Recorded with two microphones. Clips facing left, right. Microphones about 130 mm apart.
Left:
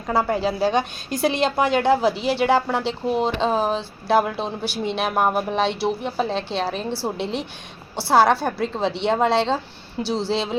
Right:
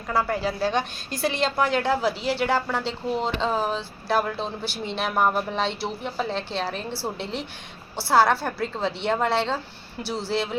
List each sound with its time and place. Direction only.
0.1 s a woman's voice: 20° left (ahead or behind)